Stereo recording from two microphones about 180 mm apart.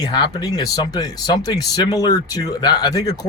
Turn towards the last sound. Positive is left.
turn(degrees=20)  # may be behind; listen again after turning